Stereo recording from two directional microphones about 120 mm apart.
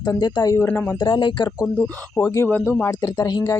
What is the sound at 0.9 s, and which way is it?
Speech, 40° left (ahead or behind).